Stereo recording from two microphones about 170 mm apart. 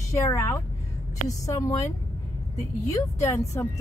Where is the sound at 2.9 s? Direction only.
20° left (ahead or behind).